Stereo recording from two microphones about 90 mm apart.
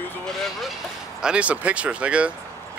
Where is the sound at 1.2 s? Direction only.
15° right (ahead or behind).